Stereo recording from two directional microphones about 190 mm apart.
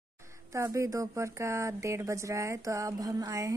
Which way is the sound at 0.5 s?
15° right (ahead or behind).